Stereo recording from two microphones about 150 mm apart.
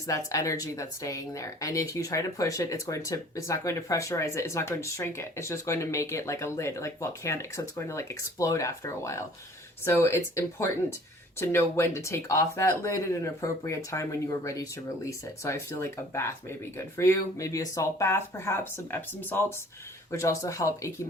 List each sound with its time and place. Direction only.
0.1 s a woman's voice: 20° left (ahead or behind)